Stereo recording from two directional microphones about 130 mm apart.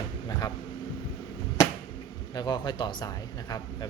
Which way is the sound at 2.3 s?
35° left (ahead or behind).